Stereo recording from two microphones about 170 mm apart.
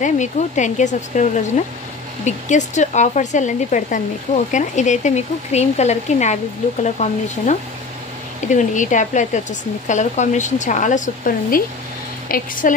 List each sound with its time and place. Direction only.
0.0 s a woman's voice: 45° left (ahead or behind)